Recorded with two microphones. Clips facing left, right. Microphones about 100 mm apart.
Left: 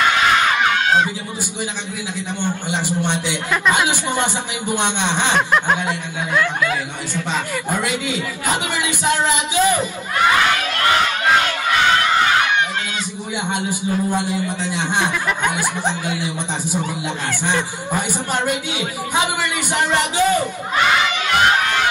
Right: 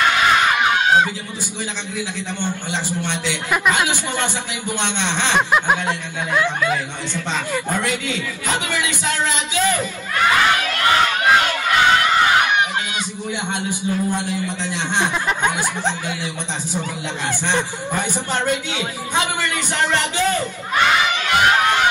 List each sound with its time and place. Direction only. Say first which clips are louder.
2.4 s a man's voice: left 3 dB; 15° left (ahead or behind)
5.9 s speech: even; 15° right (ahead or behind)
7.7 s a man's voice: left 4 dB; 15° left (ahead or behind)
13.5 s a man's voice: left 3 dB; 15° left (ahead or behind)
15.0 s snicker: even; 20° right (ahead or behind)
15.8 s a man's voice: left 2 dB; 15° left (ahead or behind)
18.3 s a man's voice: even; 15° left (ahead or behind)
21.4 s a sound: right 1 dB; 20° right (ahead or behind)